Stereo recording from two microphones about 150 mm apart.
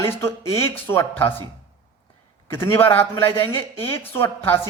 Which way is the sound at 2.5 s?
15° left (ahead or behind).